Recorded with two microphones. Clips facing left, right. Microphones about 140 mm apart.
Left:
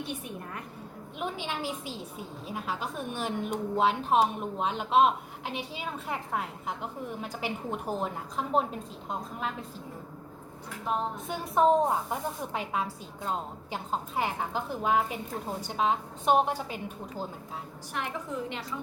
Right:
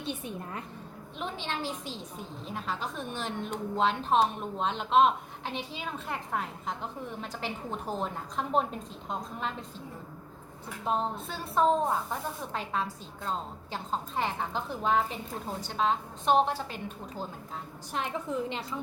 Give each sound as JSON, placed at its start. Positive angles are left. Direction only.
{"t": 0.0, "sound": "a woman's voice", "side_deg": -25}
{"t": 1.2, "sound": "a woman's voice", "side_deg": 10}
{"t": 10.9, "sound": "a woman's voice", "side_deg": -30}
{"t": 11.3, "sound": "a woman's voice", "side_deg": 15}
{"t": 17.9, "sound": "a woman's voice", "side_deg": -25}